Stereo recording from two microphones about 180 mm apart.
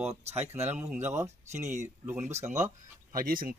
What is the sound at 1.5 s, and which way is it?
Speech, 40° right (ahead or behind).